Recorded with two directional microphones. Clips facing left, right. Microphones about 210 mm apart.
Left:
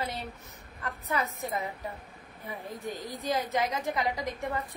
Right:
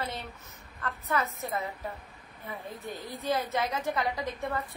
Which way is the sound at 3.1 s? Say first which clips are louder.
Even; 15° left (ahead or behind).